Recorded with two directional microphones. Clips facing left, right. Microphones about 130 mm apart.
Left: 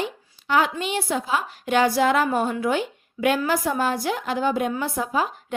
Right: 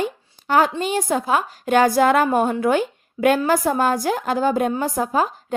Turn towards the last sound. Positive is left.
turn(degrees=-45)  # may be behind; listen again after turning